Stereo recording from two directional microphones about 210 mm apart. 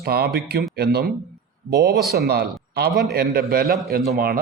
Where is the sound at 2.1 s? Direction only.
50° right (ahead or behind).